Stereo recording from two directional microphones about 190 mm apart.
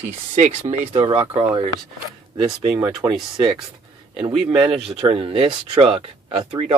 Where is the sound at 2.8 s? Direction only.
25° right (ahead or behind).